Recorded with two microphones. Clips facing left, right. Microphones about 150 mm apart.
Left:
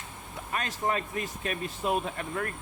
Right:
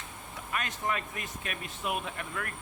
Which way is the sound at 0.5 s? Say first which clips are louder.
Left 3 dB; 35° left (ahead or behind).